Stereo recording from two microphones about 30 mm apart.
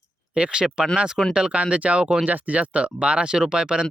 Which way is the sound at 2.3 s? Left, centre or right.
Right.